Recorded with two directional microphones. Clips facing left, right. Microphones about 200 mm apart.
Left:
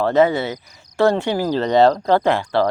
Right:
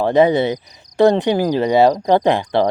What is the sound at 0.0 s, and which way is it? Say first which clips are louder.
Speech: right 3 dB; 15° right (ahead or behind).